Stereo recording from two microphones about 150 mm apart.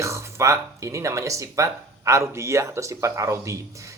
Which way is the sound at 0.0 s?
20° right (ahead or behind).